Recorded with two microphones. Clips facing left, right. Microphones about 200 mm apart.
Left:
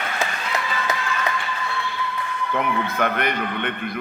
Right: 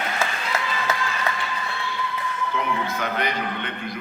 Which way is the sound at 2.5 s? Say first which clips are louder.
Left 4 dB; 55° left (ahead or behind).